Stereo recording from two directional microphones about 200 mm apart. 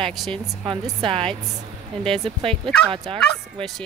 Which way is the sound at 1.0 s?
25° right (ahead or behind).